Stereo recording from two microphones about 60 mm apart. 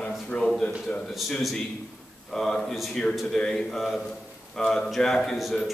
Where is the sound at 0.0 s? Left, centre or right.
Centre.